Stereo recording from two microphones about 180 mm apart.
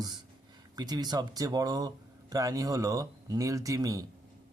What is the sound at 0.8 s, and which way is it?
Speech, 20° right (ahead or behind).